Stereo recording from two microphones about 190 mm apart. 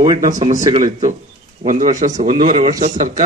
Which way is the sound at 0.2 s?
40° right (ahead or behind).